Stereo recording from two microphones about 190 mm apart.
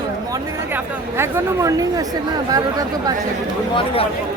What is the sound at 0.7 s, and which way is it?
Speech, 15° right (ahead or behind).